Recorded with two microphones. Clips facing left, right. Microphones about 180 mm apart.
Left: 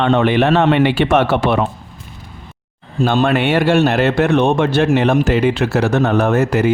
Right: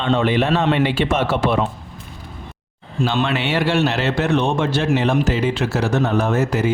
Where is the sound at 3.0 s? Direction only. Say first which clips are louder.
Left 6 dB; 50° left (ahead or behind).